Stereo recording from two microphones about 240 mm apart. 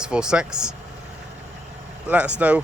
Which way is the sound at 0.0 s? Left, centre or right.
Centre.